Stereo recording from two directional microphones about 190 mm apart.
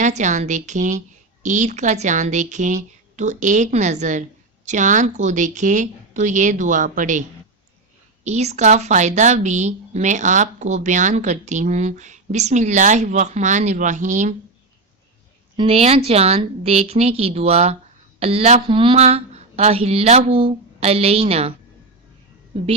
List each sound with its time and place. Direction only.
0.0 s a woman's voice: 40° right (ahead or behind)
15.5 s a woman's voice: 30° right (ahead or behind)